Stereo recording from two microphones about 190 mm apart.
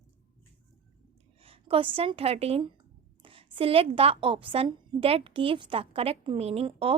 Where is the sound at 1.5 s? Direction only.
30° right (ahead or behind).